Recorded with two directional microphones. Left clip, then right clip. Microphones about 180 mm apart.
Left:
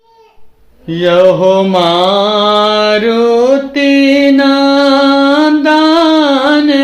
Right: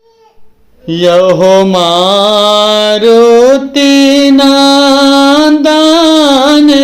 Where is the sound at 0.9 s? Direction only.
35° right (ahead or behind).